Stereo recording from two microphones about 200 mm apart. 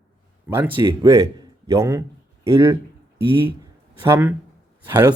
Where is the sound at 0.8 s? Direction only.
20° right (ahead or behind).